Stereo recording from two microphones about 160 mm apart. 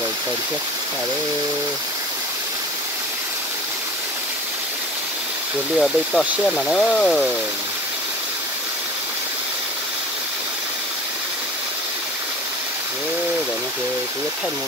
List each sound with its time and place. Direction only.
5.8 s speech: centre (ahead or behind)